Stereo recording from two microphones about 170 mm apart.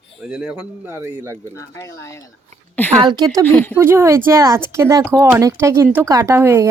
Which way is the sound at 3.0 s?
25° right (ahead or behind).